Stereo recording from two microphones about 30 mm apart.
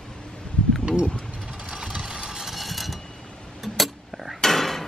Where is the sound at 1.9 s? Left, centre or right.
Right.